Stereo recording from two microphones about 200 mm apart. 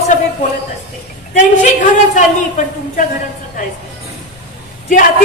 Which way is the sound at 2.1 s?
40° left (ahead or behind).